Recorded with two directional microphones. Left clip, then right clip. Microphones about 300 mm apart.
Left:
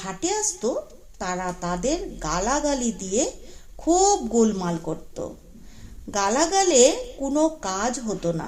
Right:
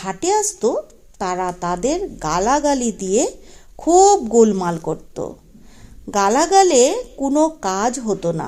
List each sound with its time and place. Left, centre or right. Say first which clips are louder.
0.0 s a woman's voice: right 8 dB; right